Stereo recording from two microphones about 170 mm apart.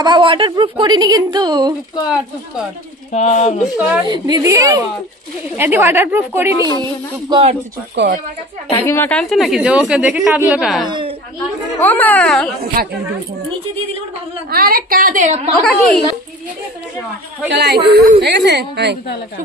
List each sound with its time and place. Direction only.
0.0 s speech: 30° right (ahead or behind)
3.1 s speech: 40° left (ahead or behind)
3.7 s a woman's voice: 10° right (ahead or behind)
4.1 s a woman's voice: 20° right (ahead or behind)
7.9 s a woman's voice: 80° right
8.7 s a woman's voice: 15° left (ahead or behind)
10.9 s a sound: 30° right (ahead or behind)
11.8 s a child's voice: 10° left (ahead or behind)
12.8 s a woman's voice: 60° right (ahead or behind)
14.5 s a woman's voice: 60° right (ahead or behind); by 15.5 s 40° right (ahead or behind)
17.5 s a woman's voice: 80° right
18.2 s a woman's voice: 85° right